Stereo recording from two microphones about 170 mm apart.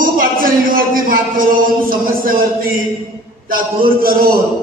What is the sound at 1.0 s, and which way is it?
Speech, 55° right (ahead or behind).